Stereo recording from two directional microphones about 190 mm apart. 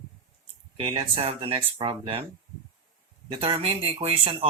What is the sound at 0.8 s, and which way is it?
Speech, 30° right (ahead or behind).